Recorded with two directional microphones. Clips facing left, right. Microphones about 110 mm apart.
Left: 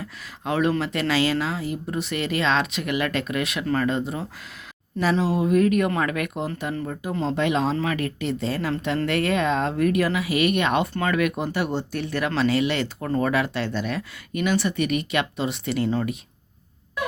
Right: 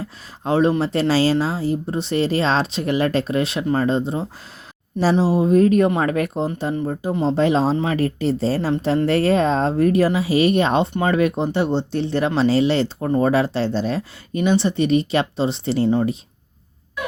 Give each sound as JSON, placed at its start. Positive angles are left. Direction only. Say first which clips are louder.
{"t": 0.0, "sound": "speech", "louder": "right 4 dB", "side_deg": -30}